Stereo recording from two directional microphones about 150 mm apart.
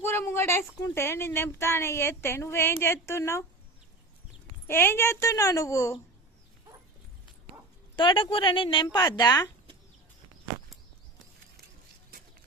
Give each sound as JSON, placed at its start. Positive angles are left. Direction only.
{"t": 0.0, "sound": "a woman's voice", "side_deg": 15}
{"t": 4.6, "sound": "a child's voice", "side_deg": 15}
{"t": 7.9, "sound": "a woman's voice", "side_deg": 35}